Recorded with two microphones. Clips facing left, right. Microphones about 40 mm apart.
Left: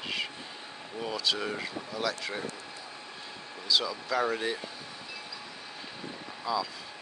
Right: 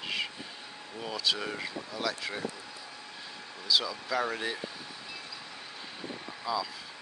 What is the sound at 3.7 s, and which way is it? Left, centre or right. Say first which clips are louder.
Speech: left 1 dB; centre.